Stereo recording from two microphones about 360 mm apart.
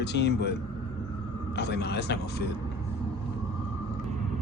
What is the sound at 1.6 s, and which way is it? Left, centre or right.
Speech, left.